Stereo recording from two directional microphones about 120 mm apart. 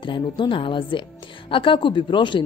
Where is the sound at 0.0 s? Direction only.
40° left (ahead or behind).